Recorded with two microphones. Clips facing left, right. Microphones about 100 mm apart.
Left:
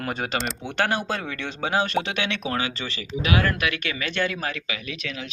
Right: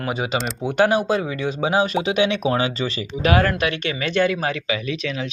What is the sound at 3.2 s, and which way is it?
Speech, 40° right (ahead or behind).